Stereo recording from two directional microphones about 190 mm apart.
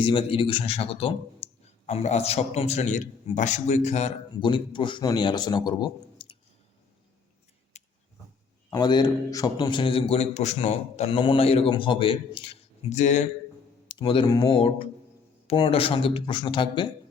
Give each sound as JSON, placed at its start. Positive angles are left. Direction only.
{"t": 0.0, "sound": "speech", "side_deg": 30}
{"t": 7.7, "sound": "a sound", "side_deg": 35}
{"t": 8.8, "sound": "speech", "side_deg": 20}
{"t": 13.8, "sound": "speech", "side_deg": 25}